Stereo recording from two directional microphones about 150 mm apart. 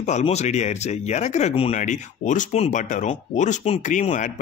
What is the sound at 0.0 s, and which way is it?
Speech, 50° left (ahead or behind).